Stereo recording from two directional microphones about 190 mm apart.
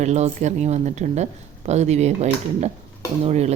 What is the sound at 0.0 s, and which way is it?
A woman's voice, 35° right (ahead or behind).